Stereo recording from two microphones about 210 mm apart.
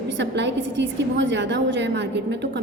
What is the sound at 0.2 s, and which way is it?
A woman's voice, 55° right (ahead or behind).